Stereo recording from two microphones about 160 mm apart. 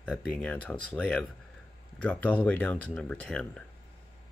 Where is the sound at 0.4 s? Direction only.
10° left (ahead or behind).